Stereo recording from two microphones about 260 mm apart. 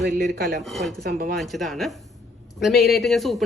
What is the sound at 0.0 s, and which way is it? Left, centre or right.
Speech, right.